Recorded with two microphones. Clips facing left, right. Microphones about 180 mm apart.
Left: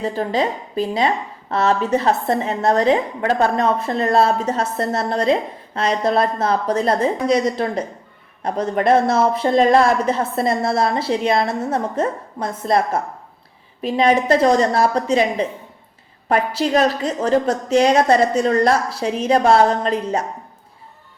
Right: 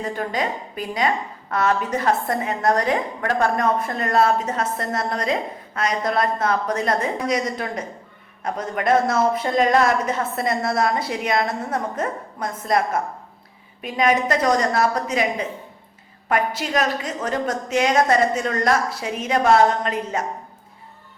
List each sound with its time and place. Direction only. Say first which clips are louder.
0.0 s a woman's voice: left 5 dB; 30° left (ahead or behind)